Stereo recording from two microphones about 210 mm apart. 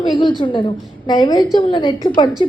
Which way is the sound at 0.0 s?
20° left (ahead or behind).